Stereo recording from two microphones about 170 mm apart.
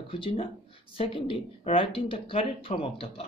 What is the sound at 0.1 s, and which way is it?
Speech, 30° left (ahead or behind).